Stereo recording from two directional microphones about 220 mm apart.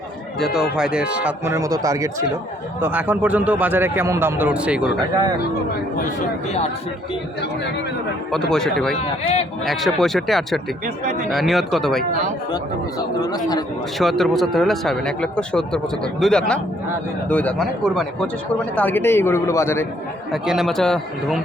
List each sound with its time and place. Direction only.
0.3 s a man's voice: centre (ahead or behind)
8.3 s speech: centre (ahead or behind)
13.0 s a man's voice: 15° left (ahead or behind)
14.0 s a man's voice: centre (ahead or behind)
20.3 s speech: centre (ahead or behind)